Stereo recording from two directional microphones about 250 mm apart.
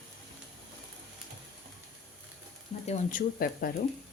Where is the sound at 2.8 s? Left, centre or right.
Left.